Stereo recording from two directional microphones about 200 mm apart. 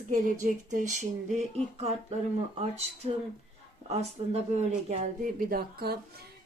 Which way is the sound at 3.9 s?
30° right (ahead or behind).